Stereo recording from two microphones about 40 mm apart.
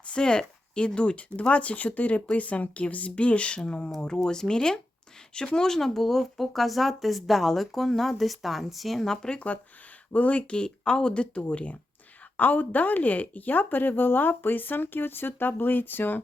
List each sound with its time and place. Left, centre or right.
0.1 s speech: left; by 9.0 s centre
9.0 s speech: centre
10.1 s speech: left
10.5 s speech: left
11.4 s speech: left